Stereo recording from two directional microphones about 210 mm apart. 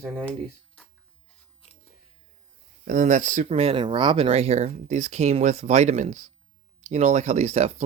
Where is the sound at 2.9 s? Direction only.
40° right (ahead or behind).